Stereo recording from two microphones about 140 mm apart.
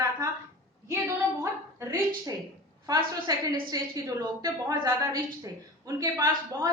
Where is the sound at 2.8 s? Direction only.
25° right (ahead or behind).